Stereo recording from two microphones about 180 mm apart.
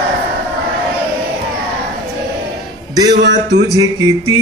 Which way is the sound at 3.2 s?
75° right (ahead or behind).